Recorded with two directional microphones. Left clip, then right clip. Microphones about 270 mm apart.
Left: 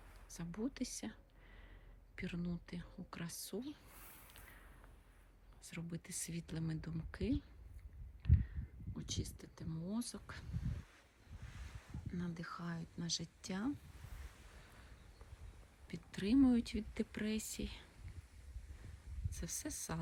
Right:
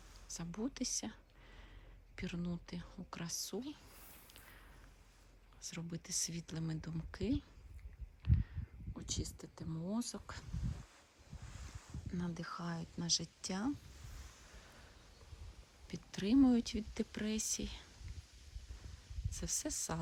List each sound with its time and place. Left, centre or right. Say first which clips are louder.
0.3 s speech: right 1 dB; centre
4.4 s a sound: right 2 dB; centre
5.6 s speech: right 3 dB; centre
8.2 s a sound: even; centre
9.0 s speech: right 2 dB; centre
11.4 s boat: right 1 dB; right
12.1 s speech: right 3 dB; centre
15.9 s speech: right 2 dB; centre
19.3 s speech: right 5 dB; centre